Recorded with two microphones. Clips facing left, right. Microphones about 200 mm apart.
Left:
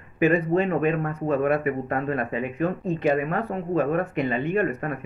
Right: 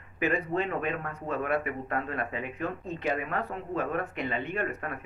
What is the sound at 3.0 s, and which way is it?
Speech, 45° left (ahead or behind).